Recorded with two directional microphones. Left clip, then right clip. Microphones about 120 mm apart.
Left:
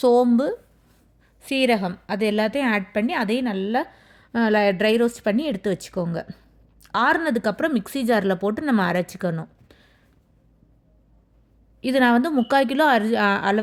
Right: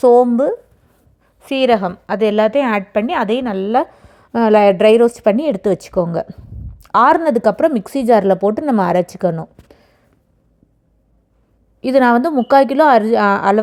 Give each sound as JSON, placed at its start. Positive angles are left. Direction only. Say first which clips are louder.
{"t": 0.0, "sound": "a woman's voice", "louder": "right 8 dB", "side_deg": -10}
{"t": 1.4, "sound": "a woman's voice", "louder": "right 7 dB", "side_deg": 0}
{"t": 3.4, "sound": "speech", "louder": "right 8 dB", "side_deg": -20}
{"t": 3.9, "sound": "speech", "louder": "right 7 dB", "side_deg": -35}
{"t": 6.3, "sound": "a woman's voice", "louder": "right 5 dB", "side_deg": -10}
{"t": 6.8, "sound": "speech", "louder": "right 9 dB", "side_deg": -30}
{"t": 9.6, "sound": "a sound", "louder": "right 7 dB", "side_deg": -20}
{"t": 11.8, "sound": "a woman's voice", "louder": "right 7 dB", "side_deg": -15}